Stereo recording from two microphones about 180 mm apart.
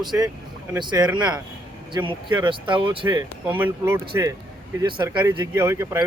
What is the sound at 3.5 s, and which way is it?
Speech, 10° right (ahead or behind).